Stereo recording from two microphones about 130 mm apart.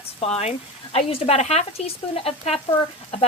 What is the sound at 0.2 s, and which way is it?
A woman's voice, 45° left (ahead or behind).